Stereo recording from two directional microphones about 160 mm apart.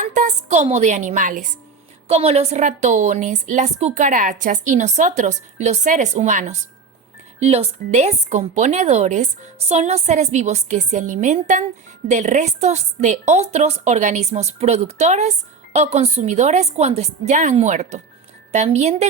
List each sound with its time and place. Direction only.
0.0 s a woman's voice: 50° right (ahead or behind)
2.0 s a woman's voice: 40° right (ahead or behind)